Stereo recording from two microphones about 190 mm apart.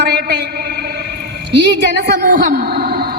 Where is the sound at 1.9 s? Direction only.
55° right (ahead or behind).